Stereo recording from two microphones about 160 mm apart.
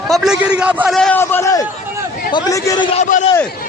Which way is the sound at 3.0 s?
50° left (ahead or behind).